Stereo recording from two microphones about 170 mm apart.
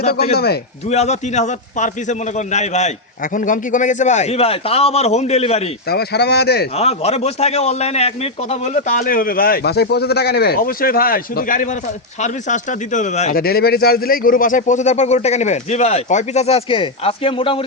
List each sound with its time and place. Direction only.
0.1 s speech: 65° left (ahead or behind)
0.9 s a man's voice: 40° left (ahead or behind)
5.9 s speech: 70° left (ahead or behind)
6.7 s a man's voice: 35° left (ahead or behind)
13.3 s a man's voice: 65° left (ahead or behind); by 17.6 s 30° left (ahead or behind)